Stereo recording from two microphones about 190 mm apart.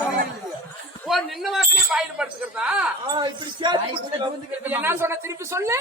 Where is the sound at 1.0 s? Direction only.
Centre (ahead or behind).